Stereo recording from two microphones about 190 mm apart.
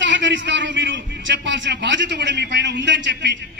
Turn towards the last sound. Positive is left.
turn(degrees=-70)  # may be behind; listen again after turning